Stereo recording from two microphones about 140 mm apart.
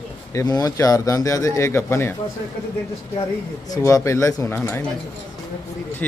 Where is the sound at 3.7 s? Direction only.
25° left (ahead or behind).